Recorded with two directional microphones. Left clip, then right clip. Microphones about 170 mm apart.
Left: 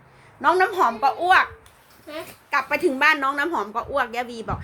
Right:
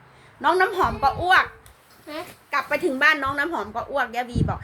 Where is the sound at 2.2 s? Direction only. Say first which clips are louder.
Left 2 dB; 30° left (ahead or behind).